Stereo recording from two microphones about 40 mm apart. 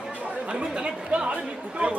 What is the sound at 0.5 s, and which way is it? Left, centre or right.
Chatter, right.